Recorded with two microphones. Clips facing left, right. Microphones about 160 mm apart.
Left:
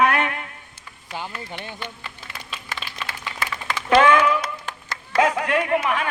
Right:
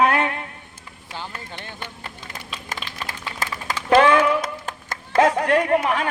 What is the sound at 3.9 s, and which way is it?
Speech, 35° right (ahead or behind).